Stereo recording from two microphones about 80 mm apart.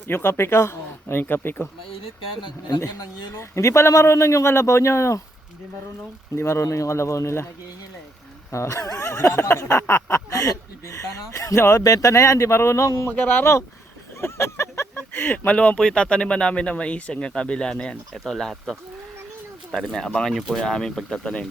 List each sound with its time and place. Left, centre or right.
0.1 s speech: left
2.4 s speech: left
3.3 s speech: left
6.3 s speech: left
8.5 s speech: left
11.8 s speech: left
13.1 s speech: left
14.2 s a sound: left
15.1 s speech: left; by 18.5 s centre
19.7 s speech: centre